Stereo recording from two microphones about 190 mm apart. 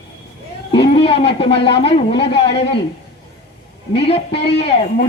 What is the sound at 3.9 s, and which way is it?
A man's voice, 30° left (ahead or behind).